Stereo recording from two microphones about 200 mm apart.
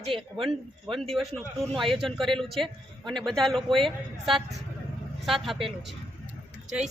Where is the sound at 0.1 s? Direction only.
25° right (ahead or behind).